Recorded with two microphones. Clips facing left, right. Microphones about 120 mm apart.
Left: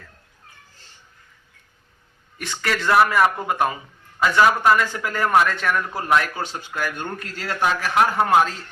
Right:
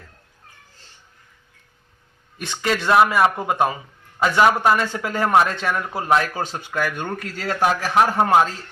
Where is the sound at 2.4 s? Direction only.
20° right (ahead or behind).